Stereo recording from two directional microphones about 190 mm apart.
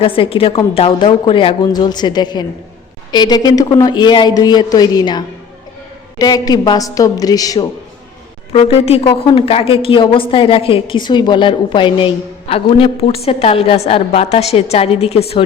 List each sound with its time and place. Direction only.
0.0 s a woman's voice: 30° left (ahead or behind)
8.5 s a woman's voice: 30° left (ahead or behind)